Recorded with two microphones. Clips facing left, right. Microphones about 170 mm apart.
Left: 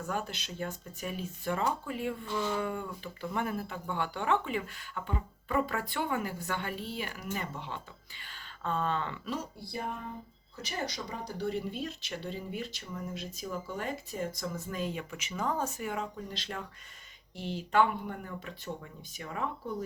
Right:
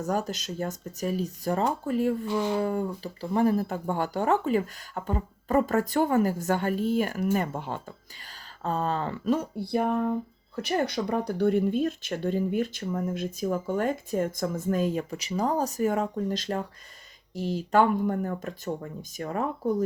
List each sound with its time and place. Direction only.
0.0 s speech: 40° right (ahead or behind)